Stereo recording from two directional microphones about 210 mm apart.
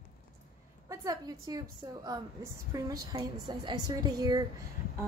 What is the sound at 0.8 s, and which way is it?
Speech, 15° right (ahead or behind).